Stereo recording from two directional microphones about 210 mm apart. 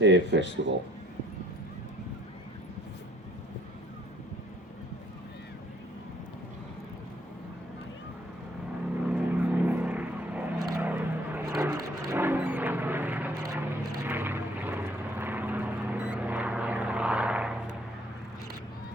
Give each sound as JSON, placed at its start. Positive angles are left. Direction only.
{"t": 0.0, "sound": "speech", "side_deg": -60}
{"t": 9.0, "sound": "vehicle", "side_deg": -5}